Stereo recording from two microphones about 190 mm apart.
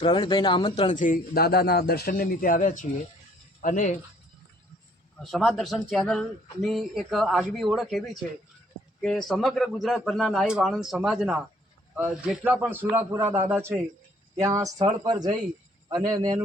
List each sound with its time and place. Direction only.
0.0 s speech: 25° left (ahead or behind)
0.9 s speech: 45° left (ahead or behind)
5.2 s a man's voice: centre (ahead or behind); by 16.4 s 20° right (ahead or behind)